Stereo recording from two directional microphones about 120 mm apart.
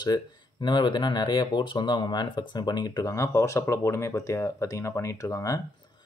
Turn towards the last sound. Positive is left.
turn(degrees=25)  # may be behind; listen again after turning